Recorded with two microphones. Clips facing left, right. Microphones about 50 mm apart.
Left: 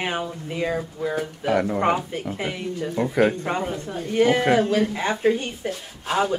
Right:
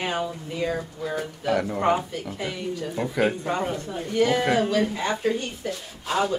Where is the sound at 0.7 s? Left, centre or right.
Centre.